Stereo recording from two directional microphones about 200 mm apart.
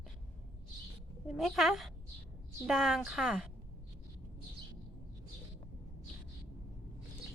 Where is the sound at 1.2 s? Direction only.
Centre (ahead or behind).